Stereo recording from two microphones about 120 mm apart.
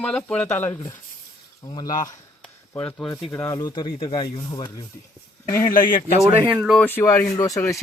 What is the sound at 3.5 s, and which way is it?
Speech, 35° left (ahead or behind).